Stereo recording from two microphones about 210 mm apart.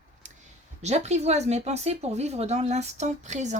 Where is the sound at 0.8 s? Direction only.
30° right (ahead or behind).